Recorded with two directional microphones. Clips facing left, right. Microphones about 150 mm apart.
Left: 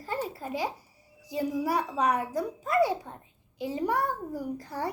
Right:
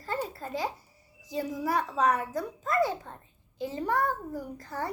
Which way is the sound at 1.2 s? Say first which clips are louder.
Left 3 dB; 10° left (ahead or behind).